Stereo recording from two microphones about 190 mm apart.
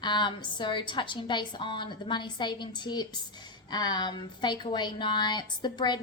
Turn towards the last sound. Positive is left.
turn(degrees=25)  # may be behind; listen again after turning